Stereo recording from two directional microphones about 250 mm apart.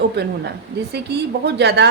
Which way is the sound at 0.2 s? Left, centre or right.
Right.